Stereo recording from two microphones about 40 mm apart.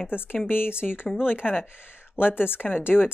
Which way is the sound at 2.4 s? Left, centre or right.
Left.